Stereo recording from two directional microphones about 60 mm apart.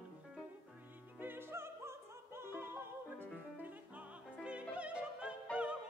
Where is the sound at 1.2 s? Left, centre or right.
Right.